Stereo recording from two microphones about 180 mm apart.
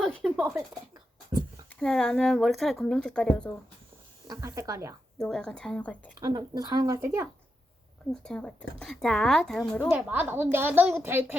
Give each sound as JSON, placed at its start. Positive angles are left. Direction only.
{"t": 0.0, "sound": "a sound", "side_deg": 5}
{"t": 1.3, "sound": "a sound", "side_deg": -20}
{"t": 1.7, "sound": "a woman's voice", "side_deg": 5}
{"t": 4.3, "sound": "a woman's voice", "side_deg": -20}
{"t": 5.1, "sound": "a woman's voice", "side_deg": 5}
{"t": 6.1, "sound": "speech", "side_deg": -25}
{"t": 8.1, "sound": "a woman's voice", "side_deg": 5}
{"t": 10.1, "sound": "a woman's voice", "side_deg": -10}